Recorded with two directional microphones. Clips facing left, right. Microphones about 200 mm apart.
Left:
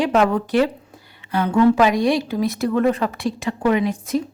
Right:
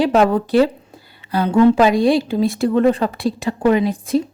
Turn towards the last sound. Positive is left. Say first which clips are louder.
# right 3 dB
turn(degrees=-30)  # may be behind; listen again after turning